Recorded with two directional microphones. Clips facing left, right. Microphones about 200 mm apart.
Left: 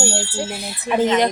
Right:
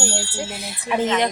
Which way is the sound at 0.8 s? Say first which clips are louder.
Left 3 dB; 35° left (ahead or behind).